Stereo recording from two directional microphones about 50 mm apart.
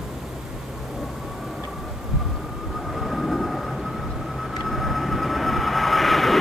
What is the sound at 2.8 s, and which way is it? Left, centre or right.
Vehicle, centre.